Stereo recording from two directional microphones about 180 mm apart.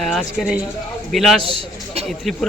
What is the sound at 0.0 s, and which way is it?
A man's voice, centre (ahead or behind).